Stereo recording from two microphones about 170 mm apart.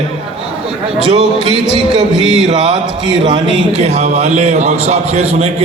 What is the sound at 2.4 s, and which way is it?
A man's voice, 40° right (ahead or behind).